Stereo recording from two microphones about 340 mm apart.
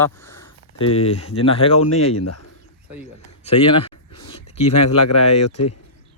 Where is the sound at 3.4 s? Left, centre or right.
Centre.